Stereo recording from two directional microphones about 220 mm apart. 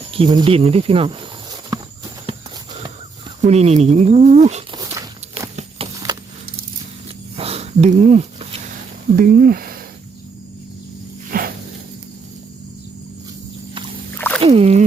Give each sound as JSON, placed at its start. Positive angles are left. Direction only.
{"t": 0.1, "sound": "speech", "side_deg": -20}
{"t": 1.7, "sound": "walk", "side_deg": -15}
{"t": 3.4, "sound": "speech", "side_deg": -30}
{"t": 4.8, "sound": "walk", "side_deg": -15}
{"t": 5.8, "sound": "a sound", "side_deg": -25}
{"t": 7.3, "sound": "sniff", "side_deg": -25}
{"t": 9.1, "sound": "speech", "side_deg": -40}
{"t": 11.3, "sound": "a sound", "side_deg": -40}
{"t": 14.2, "sound": "a sound", "side_deg": 10}
{"t": 14.4, "sound": "rowboat", "side_deg": -30}